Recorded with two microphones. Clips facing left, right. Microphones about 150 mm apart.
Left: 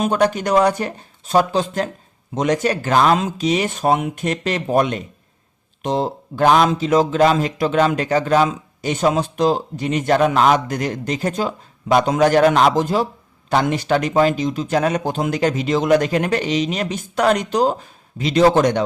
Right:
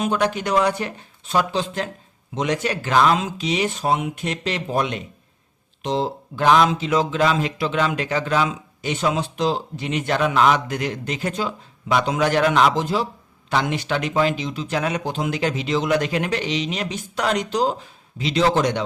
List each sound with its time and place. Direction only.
0.0 s speech: 45° left (ahead or behind)